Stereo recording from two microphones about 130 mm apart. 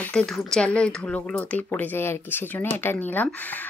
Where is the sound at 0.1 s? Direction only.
5° left (ahead or behind).